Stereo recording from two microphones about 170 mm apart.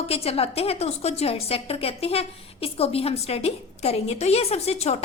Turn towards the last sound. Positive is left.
turn(degrees=40)  # may be behind; listen again after turning